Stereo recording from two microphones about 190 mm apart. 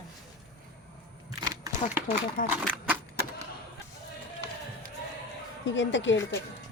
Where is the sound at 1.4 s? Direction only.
20° right (ahead or behind).